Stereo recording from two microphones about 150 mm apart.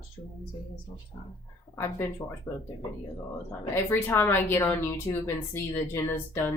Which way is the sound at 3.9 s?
15° left (ahead or behind).